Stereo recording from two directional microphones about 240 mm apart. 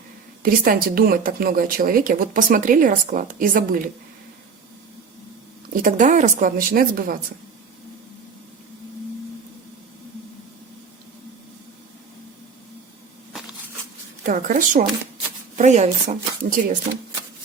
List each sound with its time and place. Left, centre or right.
0.4 s speech: right
5.8 s speech: right
14.3 s speech: right